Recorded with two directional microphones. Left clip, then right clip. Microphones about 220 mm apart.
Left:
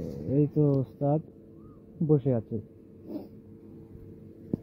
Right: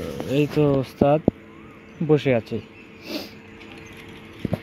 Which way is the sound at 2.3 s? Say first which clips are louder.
Right 9 dB; 10° right (ahead or behind).